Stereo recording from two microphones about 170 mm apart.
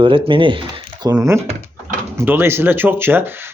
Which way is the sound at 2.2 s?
15° right (ahead or behind).